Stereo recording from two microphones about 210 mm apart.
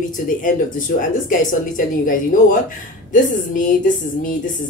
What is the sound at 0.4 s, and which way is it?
Speech, 40° left (ahead or behind).